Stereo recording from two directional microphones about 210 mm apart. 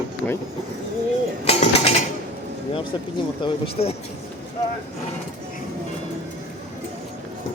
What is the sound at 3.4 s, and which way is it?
Speech, 30° left (ahead or behind).